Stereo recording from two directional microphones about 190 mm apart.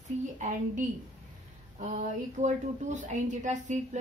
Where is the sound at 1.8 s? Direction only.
40° right (ahead or behind).